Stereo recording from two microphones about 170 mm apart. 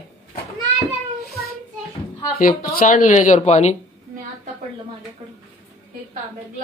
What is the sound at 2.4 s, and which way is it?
Speech, 55° left (ahead or behind).